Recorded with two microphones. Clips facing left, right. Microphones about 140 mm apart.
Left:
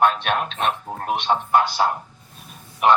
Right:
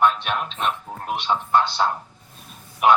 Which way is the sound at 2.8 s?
5° right (ahead or behind).